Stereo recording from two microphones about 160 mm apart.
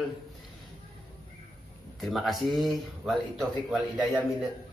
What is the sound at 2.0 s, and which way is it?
A man's voice, centre (ahead or behind).